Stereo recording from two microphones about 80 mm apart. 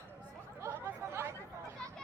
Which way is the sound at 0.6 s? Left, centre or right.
Right.